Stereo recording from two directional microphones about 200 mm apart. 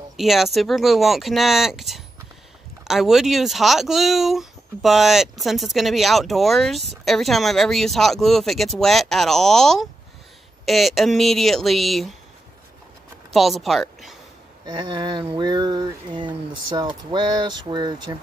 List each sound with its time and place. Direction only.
0.2 s speech: centre (ahead or behind)
13.3 s speech: centre (ahead or behind)
15.0 s speech: 20° right (ahead or behind)